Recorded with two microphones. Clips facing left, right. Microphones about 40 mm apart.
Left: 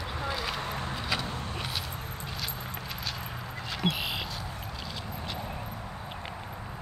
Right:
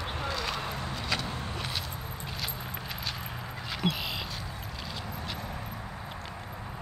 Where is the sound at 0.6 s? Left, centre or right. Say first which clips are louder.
Left 1 dB; left.